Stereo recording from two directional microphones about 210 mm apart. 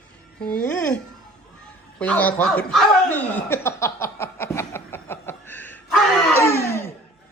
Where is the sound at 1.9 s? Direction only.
5° left (ahead or behind).